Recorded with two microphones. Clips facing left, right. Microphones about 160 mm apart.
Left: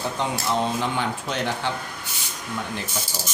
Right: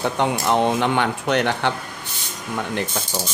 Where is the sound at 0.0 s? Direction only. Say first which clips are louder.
Right 5 dB; 65° right (ahead or behind).